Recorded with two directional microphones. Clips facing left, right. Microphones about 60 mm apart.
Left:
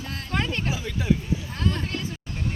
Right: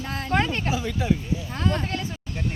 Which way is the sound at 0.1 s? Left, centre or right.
Right.